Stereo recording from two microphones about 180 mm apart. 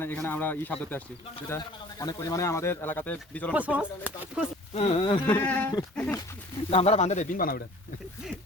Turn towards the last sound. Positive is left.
turn(degrees=55)  # may be behind; listen again after turning